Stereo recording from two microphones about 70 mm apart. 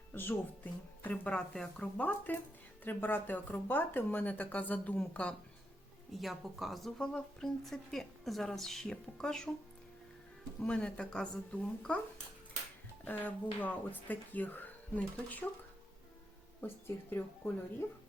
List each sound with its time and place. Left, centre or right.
0.1 s speech: left
6.1 s speech: centre
10.6 s speech: centre
13.1 s speech: left
16.6 s speech: left